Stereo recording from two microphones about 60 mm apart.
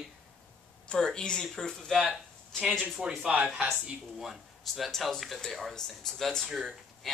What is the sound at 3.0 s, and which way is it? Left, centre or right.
Speech, centre.